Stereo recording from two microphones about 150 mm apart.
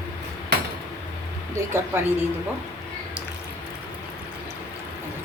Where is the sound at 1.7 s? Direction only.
15° right (ahead or behind).